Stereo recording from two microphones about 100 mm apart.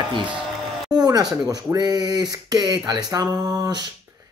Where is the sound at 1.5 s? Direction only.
40° right (ahead or behind).